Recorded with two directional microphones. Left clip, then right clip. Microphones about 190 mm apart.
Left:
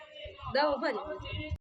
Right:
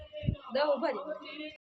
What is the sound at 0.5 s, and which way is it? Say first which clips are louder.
Speech: even; 55° left (ahead or behind).